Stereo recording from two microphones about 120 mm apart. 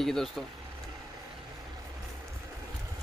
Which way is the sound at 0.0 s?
5° left (ahead or behind).